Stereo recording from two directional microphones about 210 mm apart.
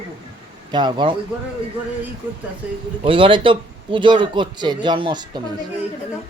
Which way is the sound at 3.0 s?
25° right (ahead or behind).